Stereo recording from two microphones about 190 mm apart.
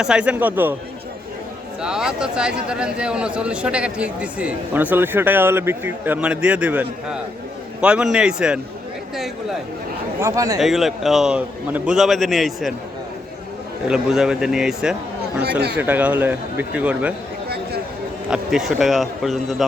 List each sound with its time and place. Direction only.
0.0 s speech: 5° right (ahead or behind)
1.8 s speech: 5° right (ahead or behind)
10.2 s speech: 15° right (ahead or behind)
10.6 s speech: centre (ahead or behind)
13.8 s speech: 5° right (ahead or behind)
18.3 s speech: centre (ahead or behind)